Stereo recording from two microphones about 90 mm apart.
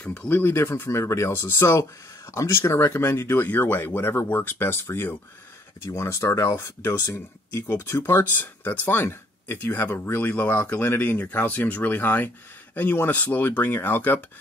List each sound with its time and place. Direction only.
0.0 s speech: 10° left (ahead or behind)